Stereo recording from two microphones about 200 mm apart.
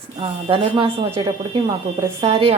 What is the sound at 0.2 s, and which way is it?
A woman's voice, 25° right (ahead or behind).